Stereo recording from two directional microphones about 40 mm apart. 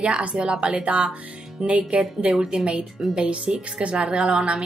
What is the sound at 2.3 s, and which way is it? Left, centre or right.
A woman's voice, right.